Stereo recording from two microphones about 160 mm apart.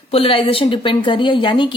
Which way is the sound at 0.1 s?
35° left (ahead or behind).